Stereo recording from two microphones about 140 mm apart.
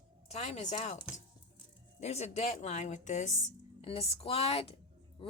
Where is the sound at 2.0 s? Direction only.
50° left (ahead or behind).